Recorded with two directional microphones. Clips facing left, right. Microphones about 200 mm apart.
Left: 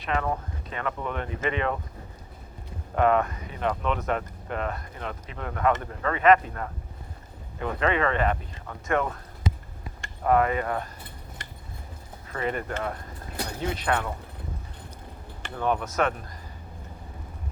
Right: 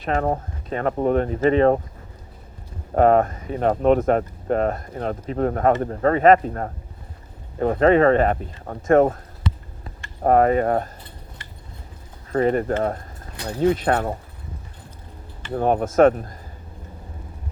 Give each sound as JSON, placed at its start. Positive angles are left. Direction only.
{"t": 0.0, "sound": "speech", "side_deg": -45}
{"t": 2.9, "sound": "speech", "side_deg": -40}
{"t": 10.2, "sound": "speech", "side_deg": -40}
{"t": 12.3, "sound": "speech", "side_deg": -40}
{"t": 15.5, "sound": "speech", "side_deg": -45}